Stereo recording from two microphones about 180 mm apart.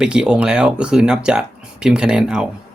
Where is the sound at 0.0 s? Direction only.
5° right (ahead or behind).